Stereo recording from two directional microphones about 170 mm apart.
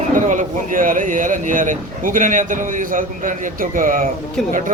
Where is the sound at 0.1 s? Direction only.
50° right (ahead or behind).